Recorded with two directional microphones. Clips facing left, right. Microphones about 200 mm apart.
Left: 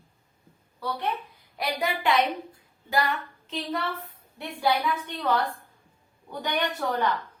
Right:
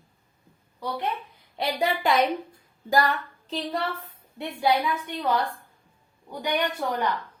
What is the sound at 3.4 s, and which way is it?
Speech, 35° right (ahead or behind).